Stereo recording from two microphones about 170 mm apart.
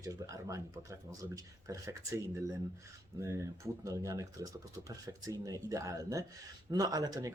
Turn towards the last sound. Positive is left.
turn(degrees=-20)  # may be behind; listen again after turning